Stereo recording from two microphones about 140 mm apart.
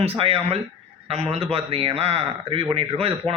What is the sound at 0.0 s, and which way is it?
A man's voice, 45° right (ahead or behind).